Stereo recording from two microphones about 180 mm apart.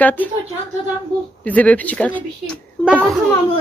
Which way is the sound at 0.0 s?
10° left (ahead or behind).